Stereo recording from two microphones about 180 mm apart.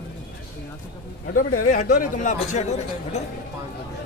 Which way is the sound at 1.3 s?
45° left (ahead or behind).